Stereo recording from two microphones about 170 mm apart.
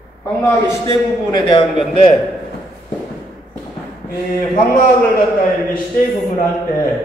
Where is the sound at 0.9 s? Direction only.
25° left (ahead or behind).